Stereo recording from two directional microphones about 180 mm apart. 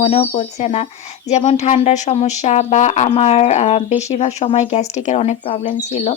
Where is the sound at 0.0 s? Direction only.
35° left (ahead or behind).